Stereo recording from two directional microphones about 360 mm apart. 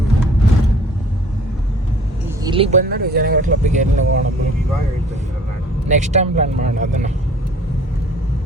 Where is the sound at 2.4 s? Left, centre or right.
Centre.